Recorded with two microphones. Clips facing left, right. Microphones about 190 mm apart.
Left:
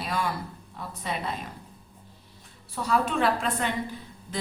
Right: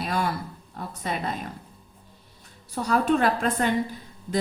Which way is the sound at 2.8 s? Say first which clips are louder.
Right 3 dB; 45° right (ahead or behind).